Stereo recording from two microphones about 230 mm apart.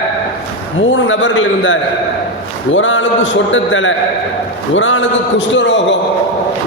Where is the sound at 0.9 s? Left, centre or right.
Left.